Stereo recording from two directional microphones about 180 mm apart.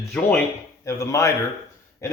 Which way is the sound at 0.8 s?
15° left (ahead or behind).